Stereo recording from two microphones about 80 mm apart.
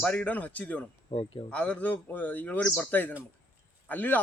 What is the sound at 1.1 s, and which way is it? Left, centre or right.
Speech, left.